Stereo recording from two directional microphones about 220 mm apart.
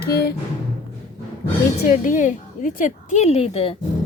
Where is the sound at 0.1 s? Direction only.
45° left (ahead or behind).